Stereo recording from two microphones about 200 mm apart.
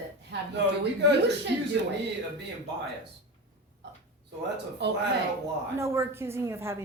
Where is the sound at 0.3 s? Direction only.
60° right (ahead or behind).